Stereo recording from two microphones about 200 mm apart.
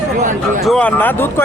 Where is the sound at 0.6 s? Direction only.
5° left (ahead or behind).